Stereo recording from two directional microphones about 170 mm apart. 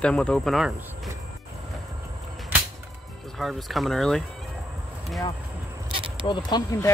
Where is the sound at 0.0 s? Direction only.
5° left (ahead or behind).